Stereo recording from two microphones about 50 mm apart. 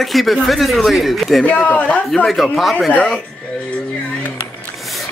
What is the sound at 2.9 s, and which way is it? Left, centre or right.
Speech, left.